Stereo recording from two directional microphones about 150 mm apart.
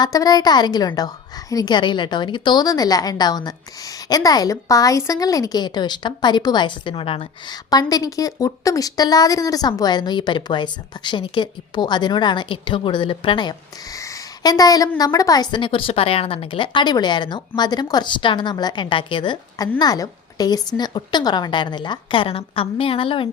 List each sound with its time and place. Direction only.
0.0 s a woman's voice: 25° left (ahead or behind)